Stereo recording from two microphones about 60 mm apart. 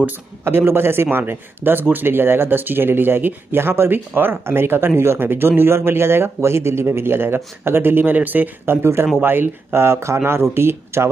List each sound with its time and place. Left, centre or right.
0.5 s speech: right